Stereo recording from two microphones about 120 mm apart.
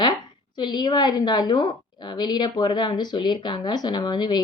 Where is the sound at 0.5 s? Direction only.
35° left (ahead or behind).